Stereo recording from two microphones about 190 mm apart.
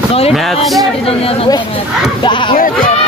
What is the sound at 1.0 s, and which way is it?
Speech, 30° left (ahead or behind).